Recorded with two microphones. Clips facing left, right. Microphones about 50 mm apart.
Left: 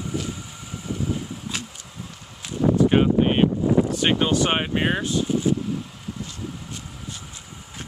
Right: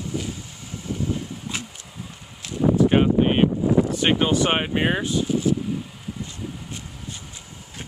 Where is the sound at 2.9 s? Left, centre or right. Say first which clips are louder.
Even; centre.